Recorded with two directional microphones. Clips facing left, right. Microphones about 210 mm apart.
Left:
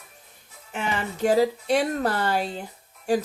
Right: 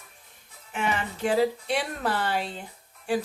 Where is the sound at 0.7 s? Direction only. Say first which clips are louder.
Even; 40° left (ahead or behind).